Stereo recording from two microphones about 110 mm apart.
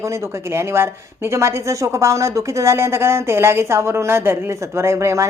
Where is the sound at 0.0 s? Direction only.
25° right (ahead or behind).